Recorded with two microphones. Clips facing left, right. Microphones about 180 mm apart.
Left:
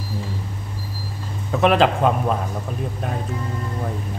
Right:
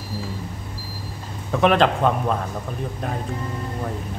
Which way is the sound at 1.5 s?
Centre (ahead or behind).